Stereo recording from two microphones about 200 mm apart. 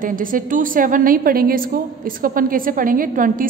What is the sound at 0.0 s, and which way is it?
A woman's voice, 45° right (ahead or behind).